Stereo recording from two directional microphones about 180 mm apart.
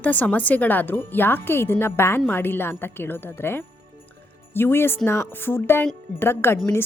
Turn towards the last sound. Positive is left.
turn(degrees=15)  # may be behind; listen again after turning